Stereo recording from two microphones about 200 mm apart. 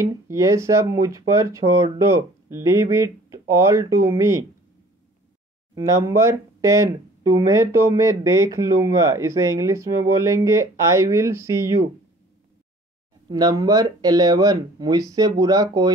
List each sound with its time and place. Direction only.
0.0 s speech: 15° right (ahead or behind)
5.8 s speech: 15° right (ahead or behind)
13.3 s speech: 20° right (ahead or behind)